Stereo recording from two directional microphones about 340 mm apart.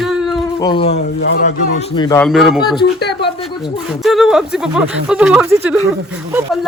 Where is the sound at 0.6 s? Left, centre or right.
Centre.